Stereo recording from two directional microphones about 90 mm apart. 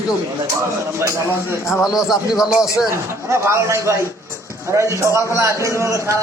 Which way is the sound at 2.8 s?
30° right (ahead or behind).